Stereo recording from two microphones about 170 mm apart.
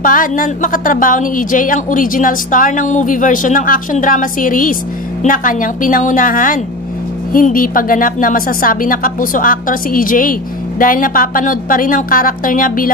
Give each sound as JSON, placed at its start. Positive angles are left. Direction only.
{"t": 0.0, "sound": "a woman's voice", "side_deg": 55}